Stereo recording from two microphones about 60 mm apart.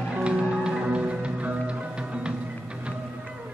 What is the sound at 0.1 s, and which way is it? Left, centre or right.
Music, centre.